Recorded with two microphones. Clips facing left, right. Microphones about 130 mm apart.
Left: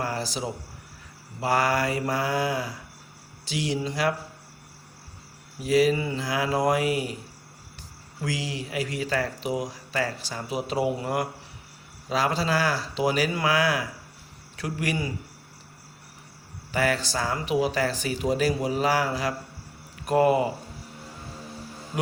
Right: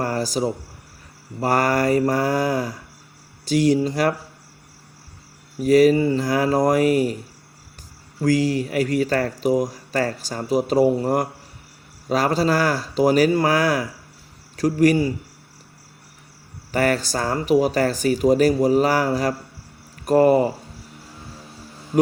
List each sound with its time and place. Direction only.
0.0 s speech: 45° right (ahead or behind)
5.6 s speech: 45° right (ahead or behind)
8.2 s a man's voice: 45° right (ahead or behind)
16.7 s speech: 45° right (ahead or behind)